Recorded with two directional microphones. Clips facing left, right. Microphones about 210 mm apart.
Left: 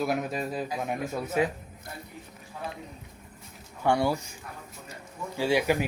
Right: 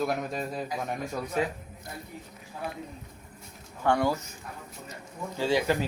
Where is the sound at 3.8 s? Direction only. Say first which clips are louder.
Left 1 dB; 10° left (ahead or behind).